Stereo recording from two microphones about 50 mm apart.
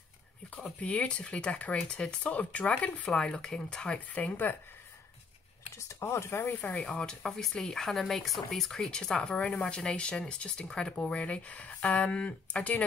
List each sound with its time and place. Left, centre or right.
0.7 s speech: left
3.1 s speech: centre
5.8 s speech: left
6.8 s speech: left
9.3 s speech: left